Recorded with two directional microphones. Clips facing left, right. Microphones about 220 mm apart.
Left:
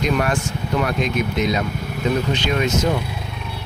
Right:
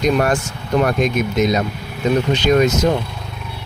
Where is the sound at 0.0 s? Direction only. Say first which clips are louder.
Right 4 dB; 40° right (ahead or behind).